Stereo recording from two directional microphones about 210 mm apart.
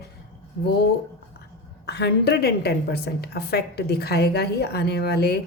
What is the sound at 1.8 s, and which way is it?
A woman's voice, 50° left (ahead or behind).